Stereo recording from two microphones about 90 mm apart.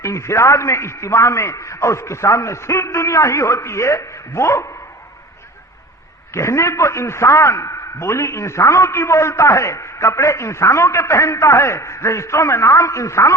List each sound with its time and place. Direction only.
0.0 s a man's voice: 35° left (ahead or behind)
6.3 s a man's voice: 30° left (ahead or behind)